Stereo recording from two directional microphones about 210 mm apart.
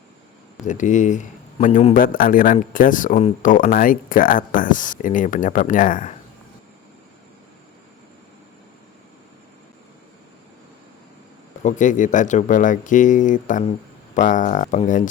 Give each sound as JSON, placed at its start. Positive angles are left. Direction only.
{"t": 0.6, "sound": "a man's voice", "side_deg": 35}
{"t": 11.6, "sound": "a man's voice", "side_deg": 35}